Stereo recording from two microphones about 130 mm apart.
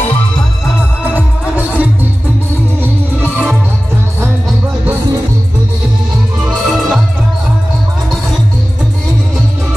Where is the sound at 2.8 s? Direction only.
15° right (ahead or behind).